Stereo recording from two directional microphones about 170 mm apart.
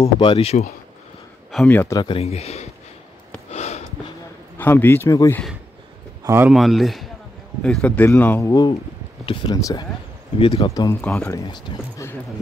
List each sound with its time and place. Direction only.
0.2 s speech: 30° left (ahead or behind)
1.5 s speech: 5° left (ahead or behind)
2.0 s speech: 30° left (ahead or behind)
3.5 s a sound: 40° left (ahead or behind)
4.6 s speech: 10° left (ahead or behind)
6.2 s speech: 15° right (ahead or behind)
6.5 s speech: centre (ahead or behind); by 11.0 s 20° left (ahead or behind)
11.0 s speech: 5° left (ahead or behind)
11.3 s speech: 20° left (ahead or behind)